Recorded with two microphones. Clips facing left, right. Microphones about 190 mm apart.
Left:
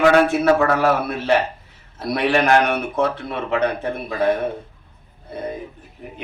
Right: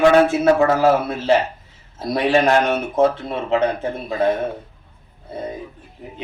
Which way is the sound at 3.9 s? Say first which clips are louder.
Even; 25° right (ahead or behind).